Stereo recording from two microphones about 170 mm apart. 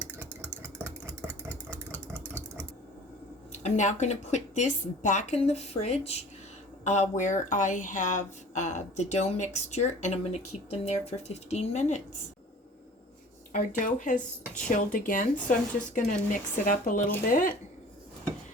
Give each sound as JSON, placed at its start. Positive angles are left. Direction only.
{"t": 0.0, "sound": "engine", "side_deg": -10}
{"t": 3.5, "sound": "a woman's voice", "side_deg": 45}
{"t": 13.5, "sound": "speech", "side_deg": 50}